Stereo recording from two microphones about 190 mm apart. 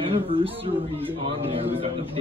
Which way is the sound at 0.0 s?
30° right (ahead or behind).